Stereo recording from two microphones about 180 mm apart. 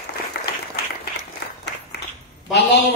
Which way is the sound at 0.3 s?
65° left (ahead or behind).